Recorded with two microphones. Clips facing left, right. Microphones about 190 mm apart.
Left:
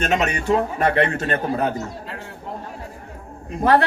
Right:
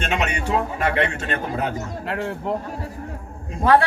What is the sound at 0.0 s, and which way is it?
A man's voice, 40° left (ahead or behind).